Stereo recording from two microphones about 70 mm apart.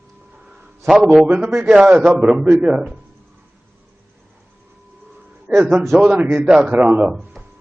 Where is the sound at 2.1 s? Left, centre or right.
Centre.